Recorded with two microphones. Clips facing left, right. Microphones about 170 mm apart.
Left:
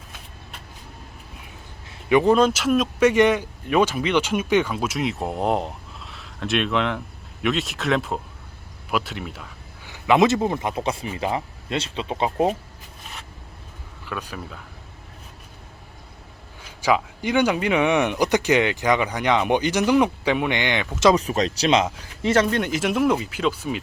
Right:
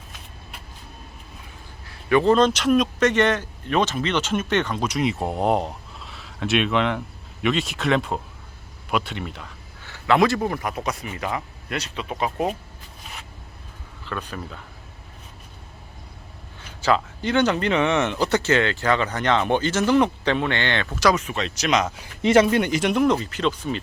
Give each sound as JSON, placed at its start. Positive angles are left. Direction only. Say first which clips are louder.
{"t": 1.9, "sound": "speech", "louder": "left 1 dB", "side_deg": 15}
{"t": 9.8, "sound": "speech", "louder": "left 1 dB", "side_deg": 15}
{"t": 14.0, "sound": "speech", "louder": "right 1 dB", "side_deg": 10}
{"t": 16.8, "sound": "speech", "louder": "even", "side_deg": 10}
{"t": 21.0, "sound": "speech", "louder": "left 4 dB", "side_deg": 30}
{"t": 22.2, "sound": "speech", "louder": "right 3 dB", "side_deg": -15}